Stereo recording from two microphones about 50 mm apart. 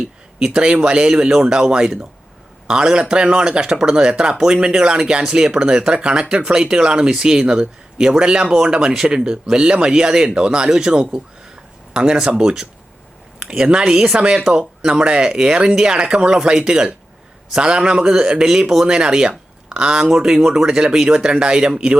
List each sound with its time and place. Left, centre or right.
0.3 s speech: centre